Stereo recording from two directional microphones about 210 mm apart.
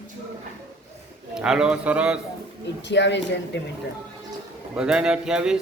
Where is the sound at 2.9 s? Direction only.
55° left (ahead or behind).